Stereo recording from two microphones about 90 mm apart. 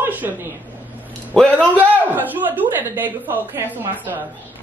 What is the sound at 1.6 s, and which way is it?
A woman's voice, 15° right (ahead or behind).